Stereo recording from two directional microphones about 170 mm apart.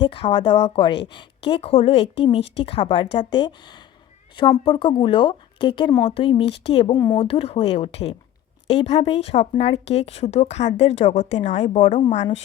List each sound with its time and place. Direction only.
0.0 s speech: 30° left (ahead or behind)